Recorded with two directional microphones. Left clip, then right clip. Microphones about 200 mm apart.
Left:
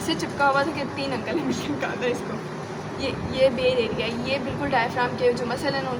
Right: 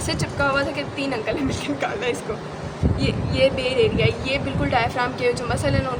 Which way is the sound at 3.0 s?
55° right (ahead or behind).